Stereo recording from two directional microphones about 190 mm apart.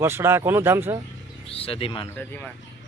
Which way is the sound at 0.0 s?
15° right (ahead or behind).